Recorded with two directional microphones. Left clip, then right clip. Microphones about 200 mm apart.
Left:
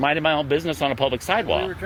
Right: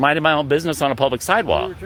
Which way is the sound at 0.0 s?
45° right (ahead or behind).